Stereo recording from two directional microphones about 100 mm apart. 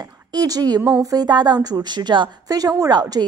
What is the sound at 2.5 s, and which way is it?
Speech, 40° right (ahead or behind).